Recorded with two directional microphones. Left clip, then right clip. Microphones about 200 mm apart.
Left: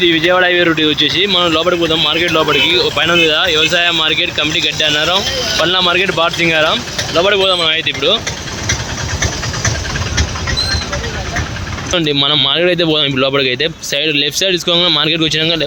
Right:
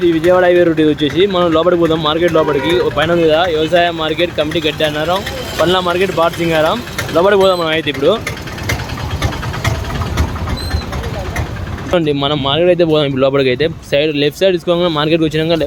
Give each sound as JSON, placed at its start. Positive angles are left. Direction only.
{"t": 0.0, "sound": "speech", "side_deg": -5}
{"t": 7.2, "sound": "speech", "side_deg": -20}
{"t": 11.9, "sound": "speech", "side_deg": -10}